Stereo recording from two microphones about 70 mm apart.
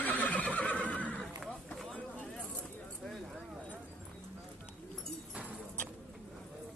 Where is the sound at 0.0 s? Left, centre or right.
Left.